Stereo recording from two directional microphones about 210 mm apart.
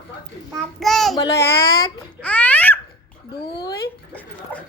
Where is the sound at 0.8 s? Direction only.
Centre (ahead or behind).